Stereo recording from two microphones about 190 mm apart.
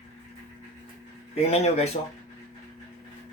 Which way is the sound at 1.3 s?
35° left (ahead or behind).